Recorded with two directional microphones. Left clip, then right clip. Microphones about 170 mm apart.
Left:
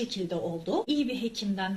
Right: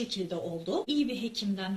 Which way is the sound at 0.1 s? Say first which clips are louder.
Left 2 dB; 15° left (ahead or behind).